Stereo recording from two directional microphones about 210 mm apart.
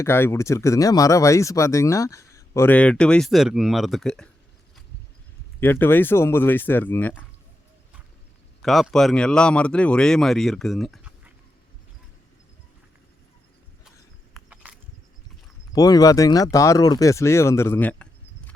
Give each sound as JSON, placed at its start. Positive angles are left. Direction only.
{"t": 0.0, "sound": "speech", "side_deg": 10}
{"t": 5.5, "sound": "speech", "side_deg": 10}
{"t": 8.6, "sound": "speech", "side_deg": 0}
{"t": 14.5, "sound": "a sound", "side_deg": -5}
{"t": 15.7, "sound": "speech", "side_deg": 20}